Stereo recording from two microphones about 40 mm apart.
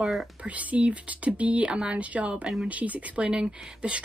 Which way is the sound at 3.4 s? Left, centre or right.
Right.